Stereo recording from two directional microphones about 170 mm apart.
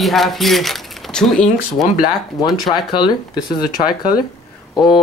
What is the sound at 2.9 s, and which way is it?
Speech, 25° left (ahead or behind).